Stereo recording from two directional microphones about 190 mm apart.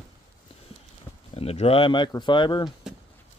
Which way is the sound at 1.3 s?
30° left (ahead or behind).